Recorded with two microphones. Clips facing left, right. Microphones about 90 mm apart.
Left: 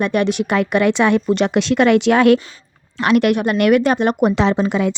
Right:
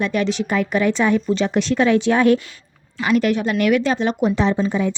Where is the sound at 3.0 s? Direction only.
70° left (ahead or behind).